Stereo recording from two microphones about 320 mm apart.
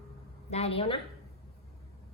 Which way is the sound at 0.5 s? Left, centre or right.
Centre.